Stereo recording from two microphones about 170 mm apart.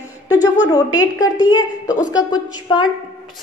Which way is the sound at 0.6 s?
20° left (ahead or behind).